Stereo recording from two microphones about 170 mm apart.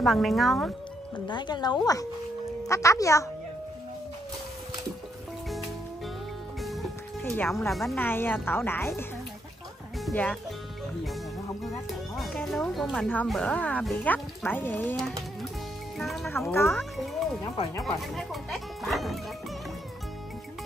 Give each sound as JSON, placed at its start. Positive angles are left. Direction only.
{"t": 0.0, "sound": "speech", "side_deg": 0}
{"t": 1.2, "sound": "speech", "side_deg": 25}
{"t": 6.6, "sound": "music", "side_deg": 0}
{"t": 7.3, "sound": "speech", "side_deg": 0}
{"t": 8.0, "sound": "speech", "side_deg": 10}
{"t": 12.2, "sound": "speech", "side_deg": 0}
{"t": 16.5, "sound": "speech", "side_deg": 15}
{"t": 16.9, "sound": "speech", "side_deg": 0}